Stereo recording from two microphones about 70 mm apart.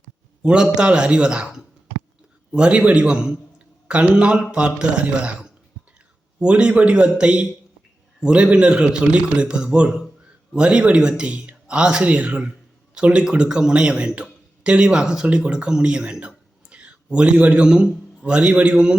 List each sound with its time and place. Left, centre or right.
0.4 s a man's voice: centre